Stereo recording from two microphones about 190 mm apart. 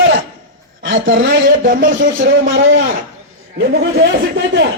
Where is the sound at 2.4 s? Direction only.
90° right.